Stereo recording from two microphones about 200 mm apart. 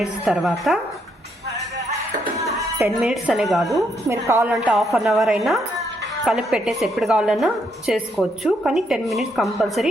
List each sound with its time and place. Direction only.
0.0 s a woman's voice: centre (ahead or behind)
2.2 s music: 15° right (ahead or behind)
2.9 s a woman's voice: 5° right (ahead or behind)
4.1 s a woman's voice: 15° right (ahead or behind)
4.5 s a woman's voice: centre (ahead or behind)